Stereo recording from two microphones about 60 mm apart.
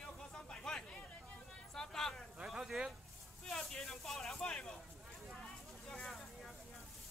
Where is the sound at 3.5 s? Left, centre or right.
Centre.